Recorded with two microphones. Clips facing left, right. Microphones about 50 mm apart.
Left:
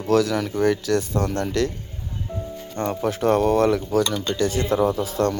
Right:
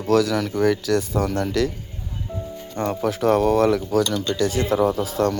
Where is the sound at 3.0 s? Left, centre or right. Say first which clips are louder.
Right 1 dB; centre.